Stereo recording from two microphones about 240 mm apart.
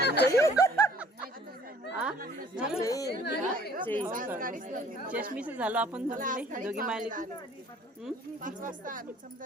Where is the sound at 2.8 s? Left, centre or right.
Centre.